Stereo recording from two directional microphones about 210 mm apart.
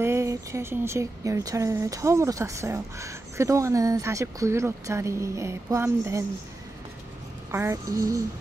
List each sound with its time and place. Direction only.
0.0 s speech: 15° right (ahead or behind)
7.5 s speech: 15° right (ahead or behind)